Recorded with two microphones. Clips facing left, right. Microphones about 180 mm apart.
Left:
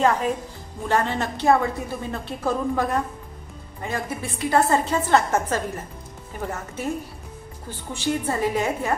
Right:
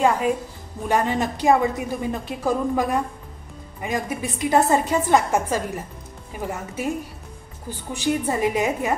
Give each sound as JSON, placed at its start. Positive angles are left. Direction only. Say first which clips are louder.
{"t": 0.8, "sound": "a woman's voice", "louder": "right 2 dB", "side_deg": -15}
{"t": 7.9, "sound": "a woman's voice", "louder": "right 2 dB", "side_deg": -15}